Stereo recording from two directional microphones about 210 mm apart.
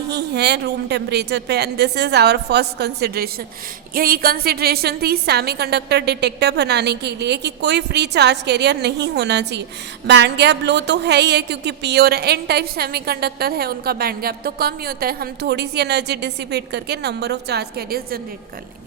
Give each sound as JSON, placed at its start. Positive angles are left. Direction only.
{"t": 0.1, "sound": "a woman's voice", "side_deg": -55}